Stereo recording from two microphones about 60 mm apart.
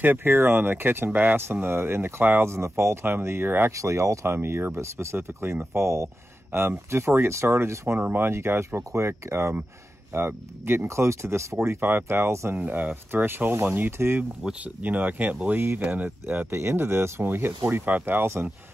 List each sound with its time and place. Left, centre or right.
0.0 s speech: right
2.4 s speech: right
3.7 s speech: right
4.3 s speech: right
8.0 s speech: right
8.3 s speech: right
12.5 s speech: right
14.4 s speech: right
16.5 s speech: right